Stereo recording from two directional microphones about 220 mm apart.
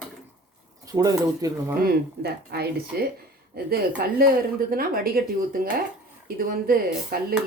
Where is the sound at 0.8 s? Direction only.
15° right (ahead or behind).